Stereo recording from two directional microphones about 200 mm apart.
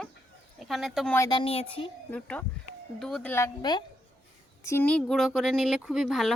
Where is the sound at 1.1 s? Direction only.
20° left (ahead or behind).